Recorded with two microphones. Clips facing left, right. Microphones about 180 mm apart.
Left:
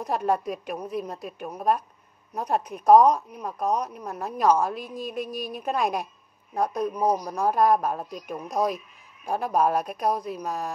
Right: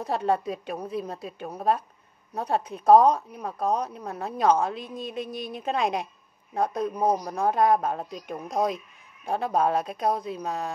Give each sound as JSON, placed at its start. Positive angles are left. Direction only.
{"t": 0.0, "sound": "a woman's voice", "side_deg": -30}